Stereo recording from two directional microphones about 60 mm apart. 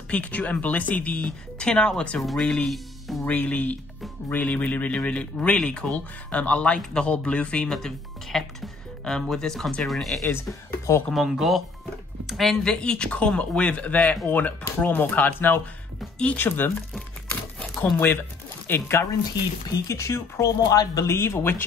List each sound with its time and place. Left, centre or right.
0.1 s speech: left; by 3.3 s centre
3.3 s speech: left
7.7 s speech: centre
10.3 s speech: left
11.1 s a woman's voice: centre
12.7 s speech: centre; by 16.7 s left
17.8 s speech: left
18.7 s speech: left
19.7 s speech: left
20.6 s speech: left
21.1 s speech: left